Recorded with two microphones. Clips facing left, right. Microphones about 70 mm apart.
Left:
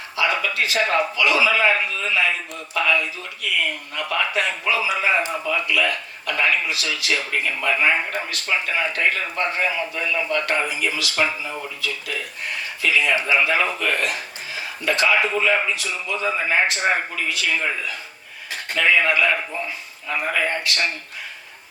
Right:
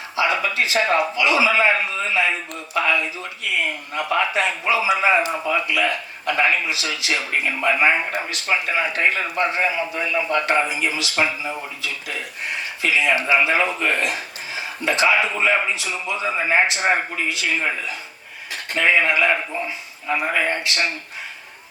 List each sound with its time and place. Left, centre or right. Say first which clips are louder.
0.2 s a man's voice: right 1 dB; right
18.7 s a man's voice: even; right